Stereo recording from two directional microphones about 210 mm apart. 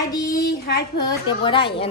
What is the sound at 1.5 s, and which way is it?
Speech, 25° left (ahead or behind).